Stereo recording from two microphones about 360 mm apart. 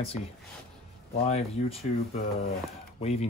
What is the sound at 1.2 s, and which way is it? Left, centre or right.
Speech, centre.